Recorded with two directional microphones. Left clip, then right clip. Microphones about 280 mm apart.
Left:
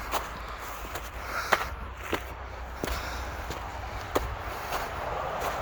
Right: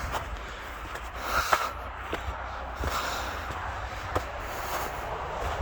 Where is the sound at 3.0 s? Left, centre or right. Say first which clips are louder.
Right 5 dB; right.